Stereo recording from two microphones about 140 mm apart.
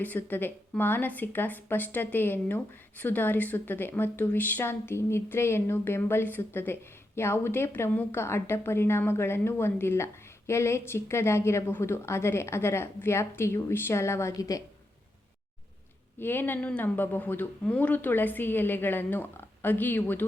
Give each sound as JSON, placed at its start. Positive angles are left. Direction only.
{"t": 0.0, "sound": "a woman's voice", "side_deg": 15}
{"t": 16.1, "sound": "a woman's voice", "side_deg": 15}